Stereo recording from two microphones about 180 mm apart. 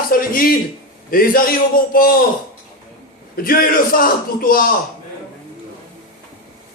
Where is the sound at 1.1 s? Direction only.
55° left (ahead or behind).